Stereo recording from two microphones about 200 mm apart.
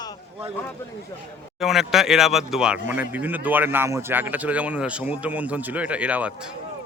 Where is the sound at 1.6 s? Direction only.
Centre (ahead or behind).